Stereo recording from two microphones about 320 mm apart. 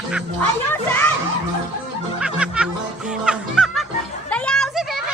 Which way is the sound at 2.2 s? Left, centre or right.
Centre.